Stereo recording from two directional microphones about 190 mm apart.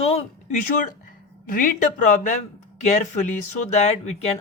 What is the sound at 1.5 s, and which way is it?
Speech, 45° left (ahead or behind).